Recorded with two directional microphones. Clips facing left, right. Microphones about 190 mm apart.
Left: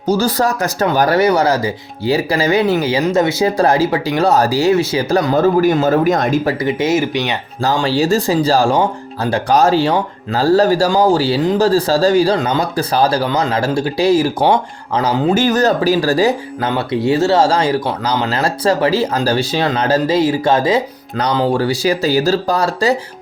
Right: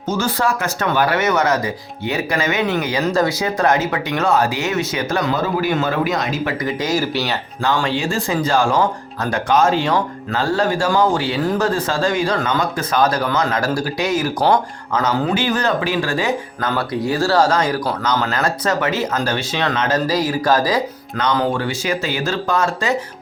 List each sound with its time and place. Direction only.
0.1 s speech: 35° left (ahead or behind)
3.0 s speech: 20° left (ahead or behind)
5.3 s a man's voice: 45° left (ahead or behind)
6.5 s speech: 30° left (ahead or behind)
7.8 s speech: 35° left (ahead or behind)
15.4 s speech: 40° left (ahead or behind); by 20.8 s 25° left (ahead or behind)
21.2 s speech: 35° left (ahead or behind)